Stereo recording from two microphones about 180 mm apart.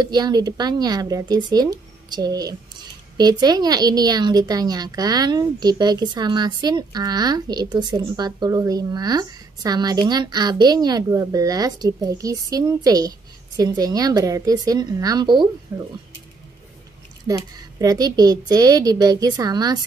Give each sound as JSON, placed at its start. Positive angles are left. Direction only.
{"t": 0.0, "sound": "a woman's voice", "side_deg": -20}
{"t": 15.7, "sound": "speech", "side_deg": -10}
{"t": 17.3, "sound": "a woman's voice", "side_deg": -20}